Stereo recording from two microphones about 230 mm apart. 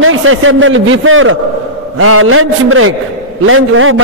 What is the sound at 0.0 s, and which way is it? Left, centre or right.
A man's voice, right.